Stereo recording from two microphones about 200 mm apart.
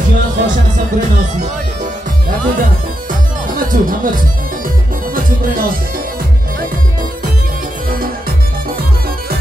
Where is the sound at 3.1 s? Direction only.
45° right (ahead or behind).